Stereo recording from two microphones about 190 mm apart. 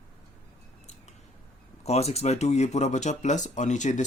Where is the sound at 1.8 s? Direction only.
35° left (ahead or behind).